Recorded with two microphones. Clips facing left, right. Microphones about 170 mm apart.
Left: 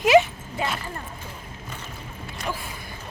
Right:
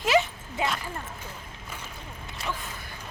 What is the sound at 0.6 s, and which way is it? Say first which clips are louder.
Speech: left 1 dB; 20° right (ahead or behind).